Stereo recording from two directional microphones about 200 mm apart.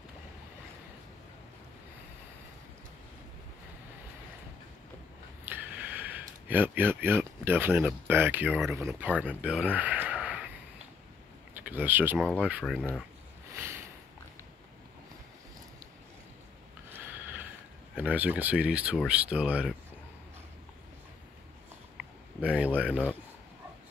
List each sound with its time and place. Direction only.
5.4 s speech: 10° right (ahead or behind)
11.5 s speech: 10° right (ahead or behind)
12.7 s speech: 5° left (ahead or behind)
16.9 s snort: 10° right (ahead or behind)
17.9 s speech: 10° right (ahead or behind)
21.9 s a sound: 5° right (ahead or behind)